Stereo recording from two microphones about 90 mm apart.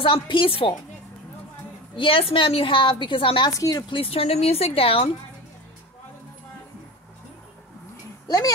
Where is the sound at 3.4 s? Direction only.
40° left (ahead or behind).